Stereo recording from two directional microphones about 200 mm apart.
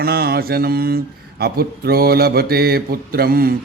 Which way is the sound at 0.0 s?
50° right (ahead or behind).